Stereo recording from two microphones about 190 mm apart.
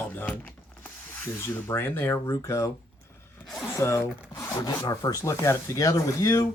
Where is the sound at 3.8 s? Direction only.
15° left (ahead or behind).